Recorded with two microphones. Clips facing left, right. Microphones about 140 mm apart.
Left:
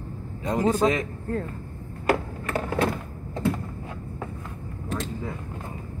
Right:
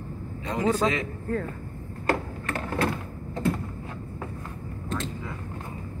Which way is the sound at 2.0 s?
10° left (ahead or behind).